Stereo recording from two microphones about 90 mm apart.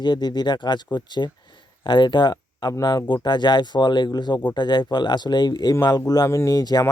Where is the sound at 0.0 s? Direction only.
55° left (ahead or behind).